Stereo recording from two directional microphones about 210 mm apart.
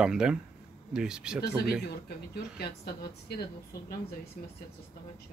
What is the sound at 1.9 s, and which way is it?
Speech, 50° left (ahead or behind).